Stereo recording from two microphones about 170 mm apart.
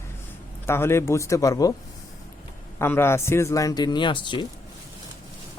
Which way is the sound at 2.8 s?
15° left (ahead or behind).